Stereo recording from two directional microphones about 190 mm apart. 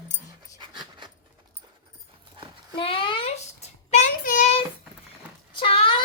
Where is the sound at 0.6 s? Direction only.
25° right (ahead or behind).